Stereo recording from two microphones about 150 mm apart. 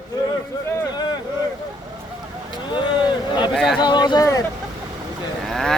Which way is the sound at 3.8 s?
30° left (ahead or behind).